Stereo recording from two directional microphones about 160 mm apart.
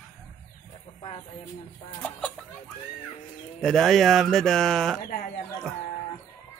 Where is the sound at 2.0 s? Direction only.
5° left (ahead or behind).